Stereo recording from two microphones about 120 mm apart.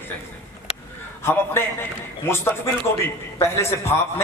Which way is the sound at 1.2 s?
20° left (ahead or behind).